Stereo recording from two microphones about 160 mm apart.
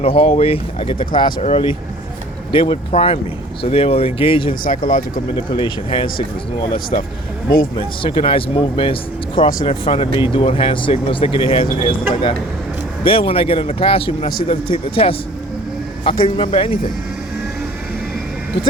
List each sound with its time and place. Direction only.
0.0 s speech: 35° left (ahead or behind)
4.9 s speech: 60° left (ahead or behind)
5.5 s speech: 35° left (ahead or behind)
7.8 s speech: 35° left (ahead or behind)
16.2 s speech: 35° left (ahead or behind)